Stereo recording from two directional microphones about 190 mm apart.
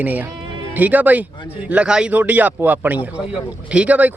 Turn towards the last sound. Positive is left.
turn(degrees=-10)  # may be behind; listen again after turning